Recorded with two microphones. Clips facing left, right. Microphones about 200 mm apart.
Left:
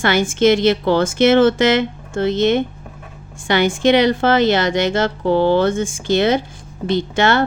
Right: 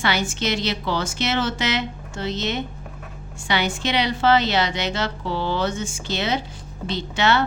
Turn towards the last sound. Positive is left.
turn(degrees=50)  # may be behind; listen again after turning